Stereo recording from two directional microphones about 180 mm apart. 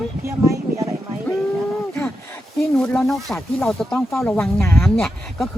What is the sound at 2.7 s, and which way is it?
Speech, 5° left (ahead or behind).